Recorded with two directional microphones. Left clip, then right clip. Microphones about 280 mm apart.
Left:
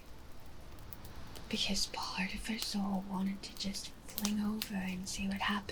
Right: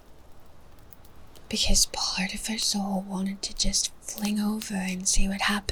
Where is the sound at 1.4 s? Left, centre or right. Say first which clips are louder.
Right 10 dB; right.